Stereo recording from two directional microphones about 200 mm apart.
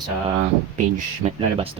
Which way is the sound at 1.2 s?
30° right (ahead or behind).